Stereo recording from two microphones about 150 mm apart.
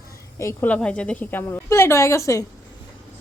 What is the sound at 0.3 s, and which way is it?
A woman's voice, 15° left (ahead or behind).